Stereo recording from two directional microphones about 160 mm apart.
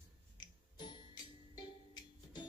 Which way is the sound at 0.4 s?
25° left (ahead or behind).